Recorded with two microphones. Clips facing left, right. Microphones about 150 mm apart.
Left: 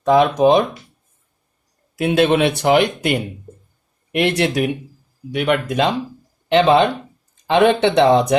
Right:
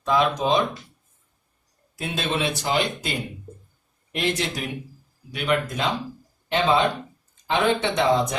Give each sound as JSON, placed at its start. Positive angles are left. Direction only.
{"t": 0.0, "sound": "speech", "side_deg": 55}
{"t": 2.0, "sound": "speech", "side_deg": 65}